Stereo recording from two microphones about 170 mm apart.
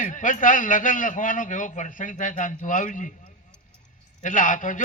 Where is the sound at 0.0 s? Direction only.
50° left (ahead or behind).